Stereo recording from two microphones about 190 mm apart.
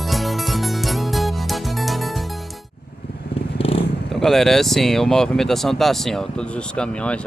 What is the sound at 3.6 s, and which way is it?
Vehicle, 30° left (ahead or behind).